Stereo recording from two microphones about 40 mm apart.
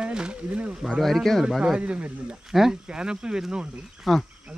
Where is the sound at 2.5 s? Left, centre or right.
Centre.